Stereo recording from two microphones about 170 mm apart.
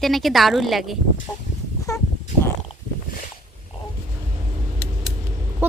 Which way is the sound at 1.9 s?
20° left (ahead or behind).